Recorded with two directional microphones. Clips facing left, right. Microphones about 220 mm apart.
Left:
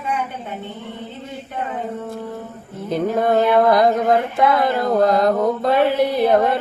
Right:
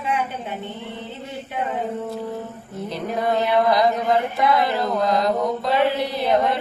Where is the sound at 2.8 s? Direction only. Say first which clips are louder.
Left 6 dB; 50° left (ahead or behind).